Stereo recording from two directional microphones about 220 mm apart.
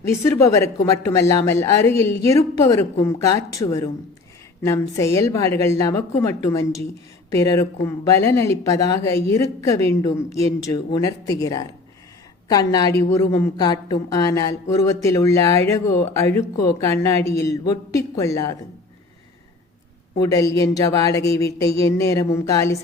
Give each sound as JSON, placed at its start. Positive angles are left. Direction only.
{"t": 0.0, "sound": "a woman's voice", "side_deg": 10}
{"t": 20.2, "sound": "a woman's voice", "side_deg": 15}